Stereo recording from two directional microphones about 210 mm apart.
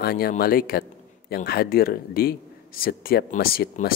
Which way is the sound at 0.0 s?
45° left (ahead or behind).